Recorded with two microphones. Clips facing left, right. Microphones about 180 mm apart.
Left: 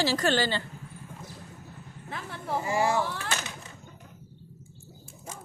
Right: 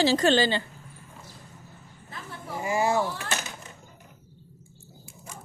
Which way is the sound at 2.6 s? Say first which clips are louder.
Right 2 dB; 20° right (ahead or behind).